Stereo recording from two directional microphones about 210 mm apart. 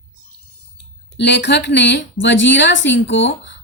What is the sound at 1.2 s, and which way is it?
A woman's voice, 55° left (ahead or behind).